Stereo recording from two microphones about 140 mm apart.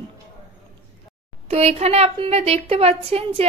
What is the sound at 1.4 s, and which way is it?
A woman's voice, 50° right (ahead or behind).